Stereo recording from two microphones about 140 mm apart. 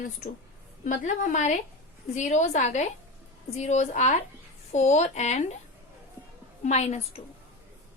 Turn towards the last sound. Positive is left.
turn(degrees=55)  # may be behind; listen again after turning